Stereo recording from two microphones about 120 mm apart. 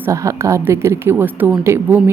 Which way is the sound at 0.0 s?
25° right (ahead or behind).